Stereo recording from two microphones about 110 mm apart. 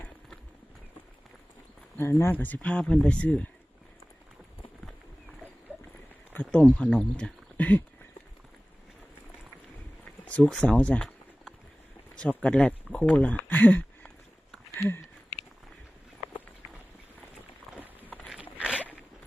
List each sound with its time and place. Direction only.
2.0 s speech: 25° left (ahead or behind)
5.7 s horse: 15° right (ahead or behind)
6.3 s speech: 10° left (ahead or behind)
10.4 s speech: 5° left (ahead or behind)
13.5 s a sound: 15° left (ahead or behind)
17.7 s clip-clop: centre (ahead or behind)
18.5 s zipper: 10° right (ahead or behind)